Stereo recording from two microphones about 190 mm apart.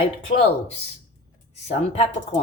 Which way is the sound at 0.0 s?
30° left (ahead or behind).